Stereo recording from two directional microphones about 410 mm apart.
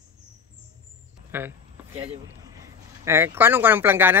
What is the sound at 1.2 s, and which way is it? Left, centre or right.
Speech, centre.